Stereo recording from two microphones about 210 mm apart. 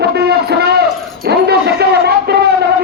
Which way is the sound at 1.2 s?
50° right (ahead or behind).